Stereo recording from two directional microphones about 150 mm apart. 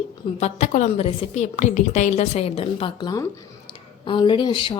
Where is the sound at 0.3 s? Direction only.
50° left (ahead or behind).